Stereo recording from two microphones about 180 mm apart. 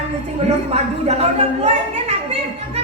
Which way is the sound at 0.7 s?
35° right (ahead or behind).